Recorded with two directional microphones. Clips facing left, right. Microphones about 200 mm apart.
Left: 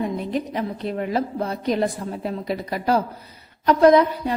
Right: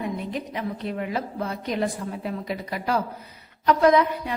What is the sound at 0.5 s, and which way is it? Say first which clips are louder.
A woman's voice: left 3 dB; 40° left (ahead or behind).